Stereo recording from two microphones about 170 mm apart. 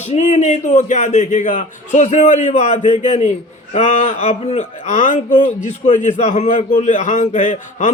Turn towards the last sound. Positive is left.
turn(degrees=45)  # may be behind; listen again after turning